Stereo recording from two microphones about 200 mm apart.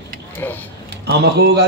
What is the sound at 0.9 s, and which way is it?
Speech, 55° right (ahead or behind).